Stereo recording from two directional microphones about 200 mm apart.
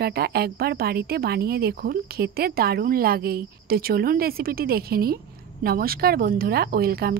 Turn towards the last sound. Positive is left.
turn(degrees=-50)  # may be behind; listen again after turning